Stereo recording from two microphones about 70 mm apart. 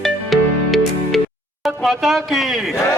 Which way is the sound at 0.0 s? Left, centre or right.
Centre.